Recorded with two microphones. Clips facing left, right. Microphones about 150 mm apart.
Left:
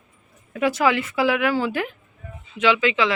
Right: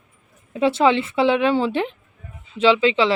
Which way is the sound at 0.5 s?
25° right (ahead or behind).